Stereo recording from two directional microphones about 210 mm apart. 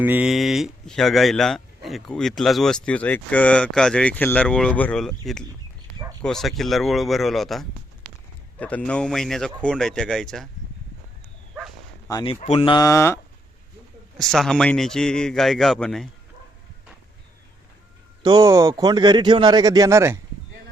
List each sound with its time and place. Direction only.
0.0 s speech: 5° right (ahead or behind)
5.9 s a sound: 15° left (ahead or behind)
6.2 s speech: centre (ahead or behind)
12.0 s speech: 20° left (ahead or behind)
14.2 s speech: centre (ahead or behind)
18.2 s speech: 20° right (ahead or behind)